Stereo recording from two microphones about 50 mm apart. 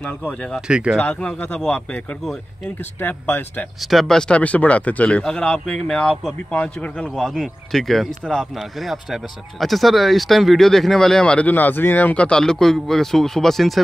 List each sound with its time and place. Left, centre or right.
0.6 s speech: centre
3.0 s speech: left
3.8 s speech: centre
4.4 s speech: left
5.4 s speech: centre
6.5 s speech: left
7.2 s speech: centre
8.7 s speech: centre
11.5 s speech: left
12.2 s speech: centre